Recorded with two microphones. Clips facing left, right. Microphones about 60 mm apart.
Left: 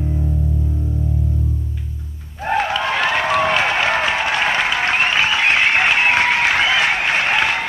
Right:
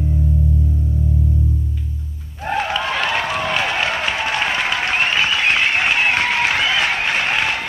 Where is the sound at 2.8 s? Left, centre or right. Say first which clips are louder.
Left 2 dB; left.